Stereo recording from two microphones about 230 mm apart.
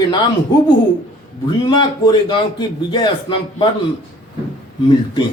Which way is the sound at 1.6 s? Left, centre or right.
Centre.